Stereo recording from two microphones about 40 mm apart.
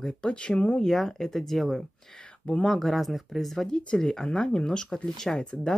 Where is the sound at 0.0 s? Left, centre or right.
Left.